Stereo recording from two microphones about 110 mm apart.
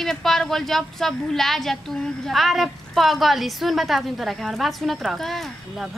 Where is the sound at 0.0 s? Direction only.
5° left (ahead or behind).